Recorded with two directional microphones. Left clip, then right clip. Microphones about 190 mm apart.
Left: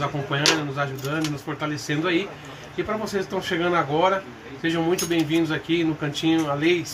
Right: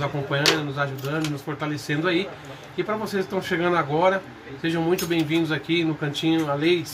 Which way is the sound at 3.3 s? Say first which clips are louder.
Even; 5° right (ahead or behind).